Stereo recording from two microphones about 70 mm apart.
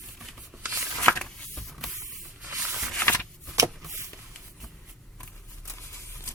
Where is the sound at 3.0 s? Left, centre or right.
Left.